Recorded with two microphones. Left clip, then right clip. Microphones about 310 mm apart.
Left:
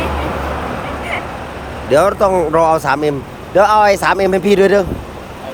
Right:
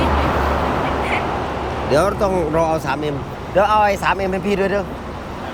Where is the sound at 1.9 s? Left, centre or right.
Centre.